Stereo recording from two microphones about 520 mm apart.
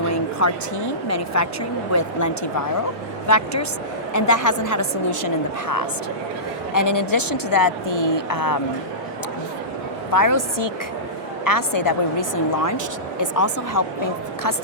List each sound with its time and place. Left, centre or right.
0.1 s speech: left
10.1 s speech: left